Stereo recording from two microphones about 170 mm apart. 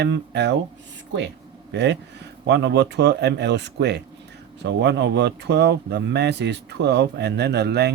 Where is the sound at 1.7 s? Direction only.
90° right.